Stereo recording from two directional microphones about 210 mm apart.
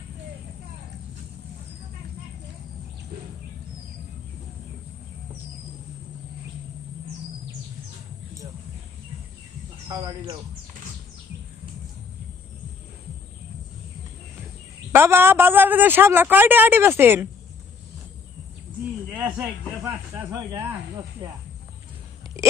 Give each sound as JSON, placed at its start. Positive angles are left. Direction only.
{"t": 9.9, "sound": "speech", "side_deg": -20}
{"t": 14.9, "sound": "a man's voice", "side_deg": -10}
{"t": 19.1, "sound": "snake", "side_deg": -5}
{"t": 21.2, "sound": "speech", "side_deg": -20}